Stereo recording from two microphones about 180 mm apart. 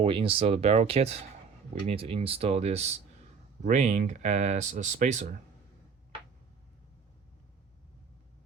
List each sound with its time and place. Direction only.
0.0 s speech: 30° right (ahead or behind)